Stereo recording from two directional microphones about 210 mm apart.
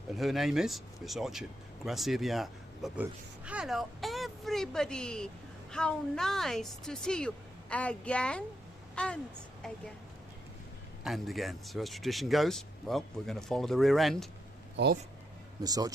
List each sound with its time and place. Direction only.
0.1 s speech: centre (ahead or behind)
11.0 s speech: centre (ahead or behind)
15.6 s speech: 15° right (ahead or behind)